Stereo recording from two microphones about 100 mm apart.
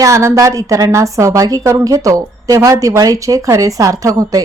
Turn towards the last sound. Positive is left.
turn(degrees=-35)  # may be behind; listen again after turning